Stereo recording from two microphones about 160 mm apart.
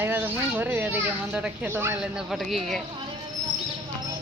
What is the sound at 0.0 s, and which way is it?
Speech, 10° right (ahead or behind).